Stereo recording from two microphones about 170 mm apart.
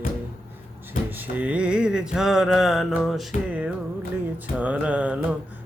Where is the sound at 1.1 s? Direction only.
10° right (ahead or behind).